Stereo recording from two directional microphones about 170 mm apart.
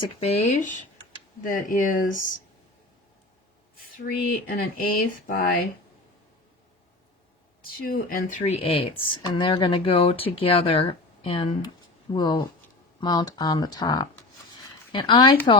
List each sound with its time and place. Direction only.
0.0 s speech: 35° left (ahead or behind)
3.9 s speech: 55° left (ahead or behind)
7.8 s speech: 55° left (ahead or behind); by 15.4 s 25° left (ahead or behind)